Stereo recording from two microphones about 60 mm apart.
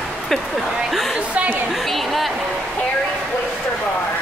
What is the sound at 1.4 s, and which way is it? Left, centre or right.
Speech, right.